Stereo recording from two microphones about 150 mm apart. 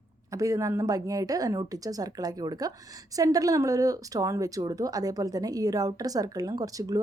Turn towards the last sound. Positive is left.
turn(degrees=-25)  # may be behind; listen again after turning